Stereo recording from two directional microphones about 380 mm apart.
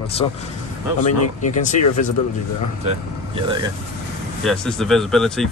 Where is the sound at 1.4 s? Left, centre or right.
Centre.